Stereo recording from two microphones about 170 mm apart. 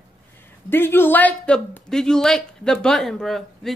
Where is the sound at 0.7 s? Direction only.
15° left (ahead or behind).